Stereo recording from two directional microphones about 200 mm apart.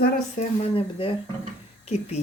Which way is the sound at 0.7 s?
25° left (ahead or behind).